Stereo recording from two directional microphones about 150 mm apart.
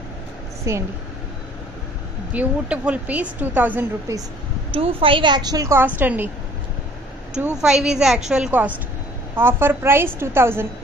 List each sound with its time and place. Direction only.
0.7 s a woman's voice: 20° right (ahead or behind)
2.3 s a woman's voice: 10° right (ahead or behind)
4.6 s a woman's voice: 40° right (ahead or behind); by 6.3 s 10° right (ahead or behind)
7.3 s a woman's voice: 5° right (ahead or behind)